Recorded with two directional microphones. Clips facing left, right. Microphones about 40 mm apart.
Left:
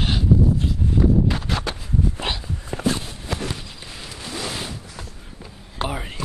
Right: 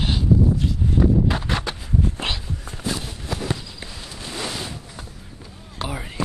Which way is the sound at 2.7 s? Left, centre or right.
Left.